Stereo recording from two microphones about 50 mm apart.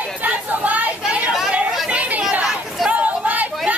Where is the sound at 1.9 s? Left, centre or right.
Right.